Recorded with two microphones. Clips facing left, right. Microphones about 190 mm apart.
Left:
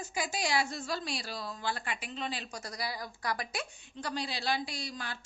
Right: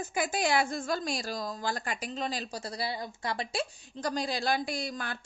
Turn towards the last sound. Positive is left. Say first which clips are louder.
# right 6 dB
turn(degrees=-50)  # may be behind; listen again after turning